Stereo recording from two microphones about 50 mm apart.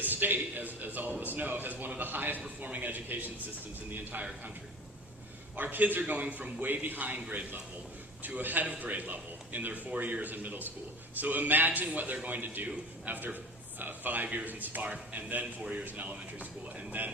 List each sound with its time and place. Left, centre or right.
0.0 s a man's voice: right
5.5 s speech: right